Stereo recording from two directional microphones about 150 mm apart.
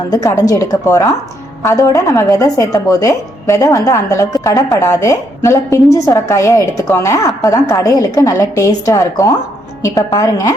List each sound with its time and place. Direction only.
0.1 s speech: 20° left (ahead or behind)